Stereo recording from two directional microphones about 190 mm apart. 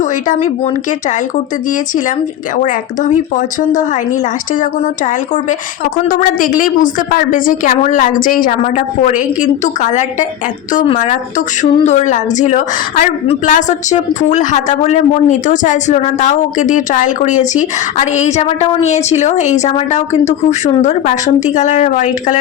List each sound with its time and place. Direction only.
0.0 s a woman's voice: 40° left (ahead or behind)
2.6 s a woman's voice: 45° left (ahead or behind)